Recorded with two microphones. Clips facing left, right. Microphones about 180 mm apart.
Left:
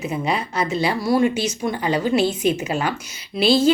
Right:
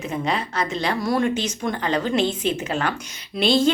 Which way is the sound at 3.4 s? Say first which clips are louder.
Left 3 dB; 5° left (ahead or behind).